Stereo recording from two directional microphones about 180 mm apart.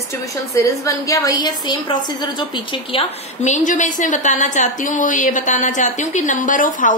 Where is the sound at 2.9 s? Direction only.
40° left (ahead or behind).